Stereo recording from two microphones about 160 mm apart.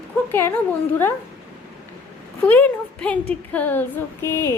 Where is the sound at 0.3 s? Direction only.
15° left (ahead or behind).